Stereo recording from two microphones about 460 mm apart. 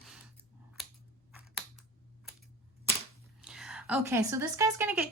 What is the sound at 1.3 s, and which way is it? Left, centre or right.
Computer keyboard, centre.